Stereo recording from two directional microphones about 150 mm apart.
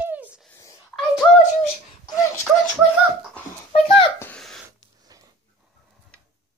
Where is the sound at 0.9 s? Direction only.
5° left (ahead or behind).